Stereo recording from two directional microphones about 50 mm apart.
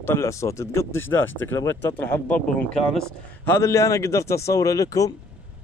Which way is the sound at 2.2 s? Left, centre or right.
Left.